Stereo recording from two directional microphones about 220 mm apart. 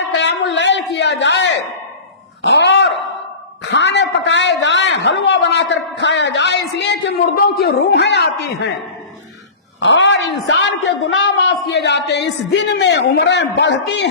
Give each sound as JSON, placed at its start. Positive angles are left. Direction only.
{"t": 0.2, "sound": "a sound", "side_deg": 55}
{"t": 2.4, "sound": "dog", "side_deg": 55}
{"t": 3.7, "sound": "a man's voice", "side_deg": 55}
{"t": 9.8, "sound": "a woman's voice", "side_deg": 55}